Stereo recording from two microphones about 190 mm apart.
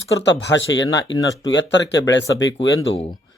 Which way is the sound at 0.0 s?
75° left (ahead or behind).